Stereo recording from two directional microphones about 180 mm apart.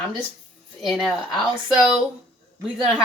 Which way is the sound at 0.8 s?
Centre (ahead or behind).